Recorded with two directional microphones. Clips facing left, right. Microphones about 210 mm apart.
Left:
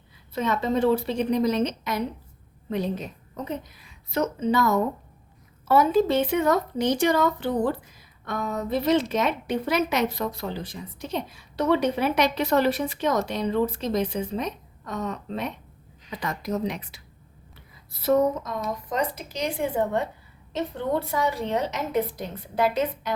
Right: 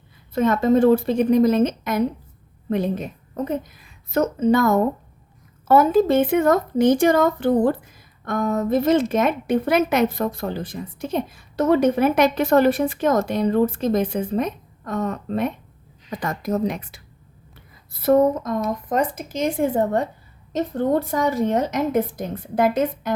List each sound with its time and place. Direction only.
0.3 s a woman's voice: 50° right (ahead or behind)